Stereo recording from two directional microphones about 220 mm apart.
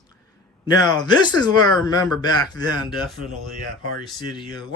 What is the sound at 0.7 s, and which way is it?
Speech, 20° left (ahead or behind).